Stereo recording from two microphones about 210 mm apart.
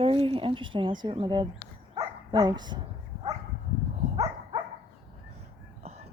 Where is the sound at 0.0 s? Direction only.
25° right (ahead or behind).